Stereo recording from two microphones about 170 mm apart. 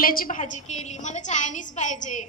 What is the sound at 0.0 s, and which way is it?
A woman's voice, 55° left (ahead or behind).